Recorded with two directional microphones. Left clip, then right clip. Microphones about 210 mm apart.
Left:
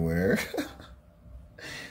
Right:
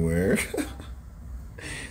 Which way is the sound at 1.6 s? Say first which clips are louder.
Right 3 dB; 10° left (ahead or behind).